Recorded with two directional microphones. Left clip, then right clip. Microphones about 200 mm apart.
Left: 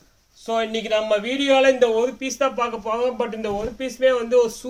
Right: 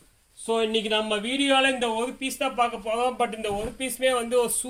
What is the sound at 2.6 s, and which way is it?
A man's voice, centre (ahead or behind).